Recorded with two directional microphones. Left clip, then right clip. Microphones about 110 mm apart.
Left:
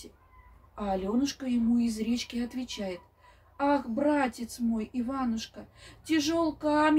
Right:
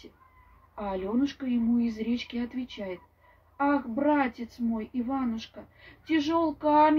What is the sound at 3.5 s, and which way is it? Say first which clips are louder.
A woman's voice: even; 20° left (ahead or behind).